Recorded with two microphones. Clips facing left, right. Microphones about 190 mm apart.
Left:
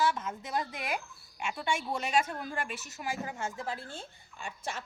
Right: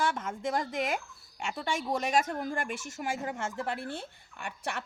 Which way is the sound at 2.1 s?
45° right (ahead or behind).